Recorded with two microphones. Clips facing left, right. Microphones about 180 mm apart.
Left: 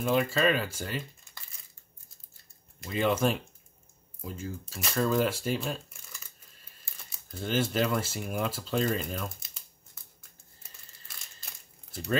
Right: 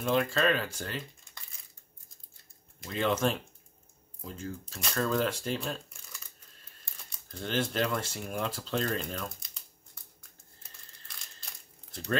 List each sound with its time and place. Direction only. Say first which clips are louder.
0.0 s speech: left 2 dB; 5° left (ahead or behind)
2.8 s speech: left 2 dB; 5° left (ahead or behind)
10.6 s crumpling: even; 5° left (ahead or behind)